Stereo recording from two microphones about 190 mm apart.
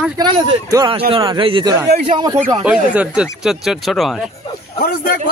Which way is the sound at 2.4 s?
10° right (ahead or behind).